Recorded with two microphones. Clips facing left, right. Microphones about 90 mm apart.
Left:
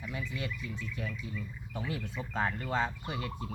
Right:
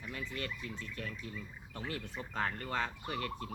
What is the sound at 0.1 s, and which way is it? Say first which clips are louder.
Speech: left 2 dB; 10° left (ahead or behind).